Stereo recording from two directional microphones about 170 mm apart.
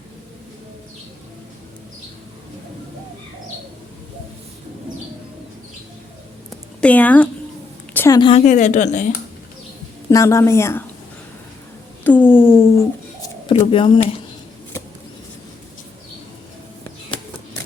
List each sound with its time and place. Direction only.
6.5 s a sound: 10° left (ahead or behind)
7.9 s a woman's voice: 15° left (ahead or behind)
8.2 s speech: 35° left (ahead or behind)
10.1 s a woman's voice: 20° left (ahead or behind)
12.0 s a sound: 10° left (ahead or behind)
13.7 s speech: 30° left (ahead or behind)